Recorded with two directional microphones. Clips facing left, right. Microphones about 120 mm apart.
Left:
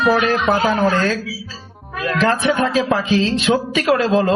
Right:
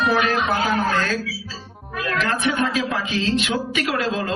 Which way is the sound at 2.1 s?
30° left (ahead or behind).